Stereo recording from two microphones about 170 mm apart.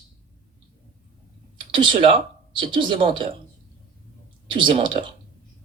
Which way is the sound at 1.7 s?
30° right (ahead or behind).